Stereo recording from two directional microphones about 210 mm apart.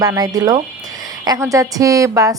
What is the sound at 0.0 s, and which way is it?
A woman's voice, 20° right (ahead or behind).